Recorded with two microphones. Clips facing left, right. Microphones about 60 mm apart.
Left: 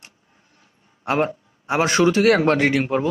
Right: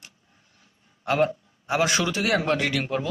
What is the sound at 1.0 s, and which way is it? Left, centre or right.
A man's voice, left.